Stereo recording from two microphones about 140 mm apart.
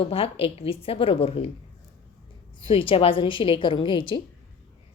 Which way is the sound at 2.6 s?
40° left (ahead or behind).